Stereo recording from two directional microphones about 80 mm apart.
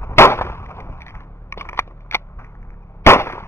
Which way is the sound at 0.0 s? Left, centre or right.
Left.